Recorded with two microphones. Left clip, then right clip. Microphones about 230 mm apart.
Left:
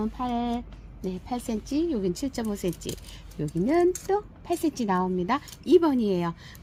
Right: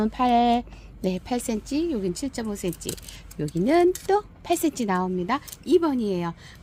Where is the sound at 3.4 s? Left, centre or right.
Right; by 6.3 s centre.